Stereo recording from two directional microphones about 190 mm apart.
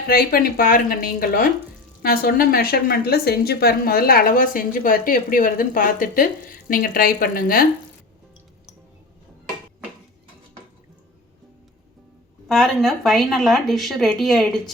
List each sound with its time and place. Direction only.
0.1 s a woman's voice: 50° left (ahead or behind)
12.5 s speech: centre (ahead or behind)